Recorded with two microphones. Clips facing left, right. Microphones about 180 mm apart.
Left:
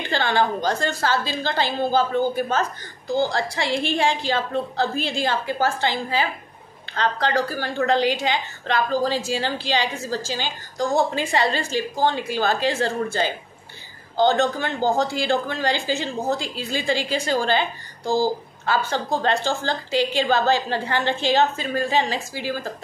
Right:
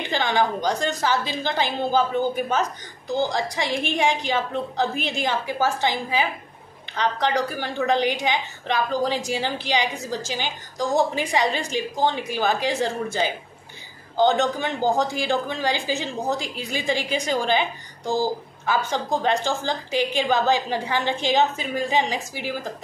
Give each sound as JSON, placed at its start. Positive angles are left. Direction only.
{"t": 0.1, "sound": "a woman's voice", "side_deg": -15}